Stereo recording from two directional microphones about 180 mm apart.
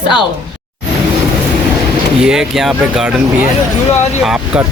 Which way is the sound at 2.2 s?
5° right (ahead or behind).